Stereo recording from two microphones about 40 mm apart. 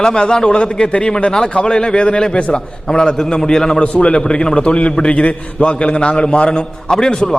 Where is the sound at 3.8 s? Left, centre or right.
Left.